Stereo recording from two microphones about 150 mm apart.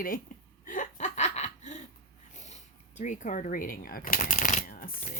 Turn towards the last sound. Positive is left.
turn(degrees=70)  # may be behind; listen again after turning